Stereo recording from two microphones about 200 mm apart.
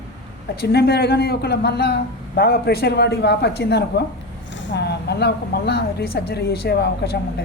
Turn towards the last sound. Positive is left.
turn(degrees=55)  # may be behind; listen again after turning